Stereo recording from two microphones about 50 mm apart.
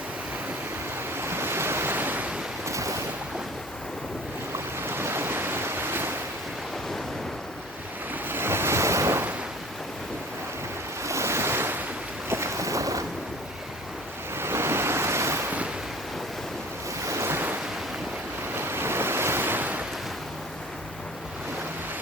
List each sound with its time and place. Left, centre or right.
1.1 s waves: right
2.0 s waves: right
2.6 s boat: right
4.8 s waves: right
8.3 s waves: right
11.0 s waves: right
12.3 s boat: right
14.3 s waves: right
17.1 s waves: right
18.5 s waves: right